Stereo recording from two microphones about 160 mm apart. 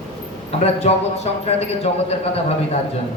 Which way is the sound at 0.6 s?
40° left (ahead or behind).